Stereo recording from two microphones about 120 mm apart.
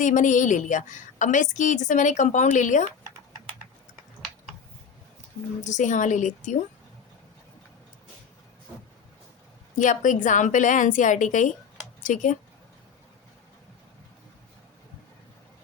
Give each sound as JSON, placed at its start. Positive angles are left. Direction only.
{"t": 0.0, "sound": "a woman's voice", "side_deg": 90}
{"t": 5.6, "sound": "a woman's voice", "side_deg": 90}
{"t": 9.7, "sound": "a woman's voice", "side_deg": 90}